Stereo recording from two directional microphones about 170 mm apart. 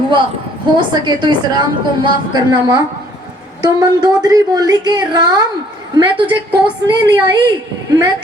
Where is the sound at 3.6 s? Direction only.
25° right (ahead or behind).